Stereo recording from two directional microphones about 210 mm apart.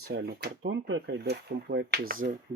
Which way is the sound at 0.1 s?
55° right (ahead or behind).